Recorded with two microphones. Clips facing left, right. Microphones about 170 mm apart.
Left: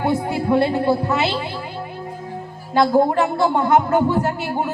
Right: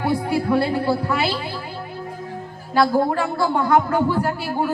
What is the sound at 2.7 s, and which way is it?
Speech, 20° left (ahead or behind).